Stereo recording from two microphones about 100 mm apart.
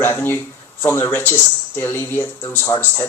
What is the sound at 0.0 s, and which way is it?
Speech, 20° left (ahead or behind).